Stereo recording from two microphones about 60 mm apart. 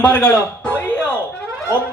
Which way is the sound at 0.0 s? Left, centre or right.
Left.